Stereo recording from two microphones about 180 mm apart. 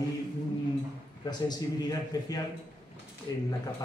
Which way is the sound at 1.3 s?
20° left (ahead or behind).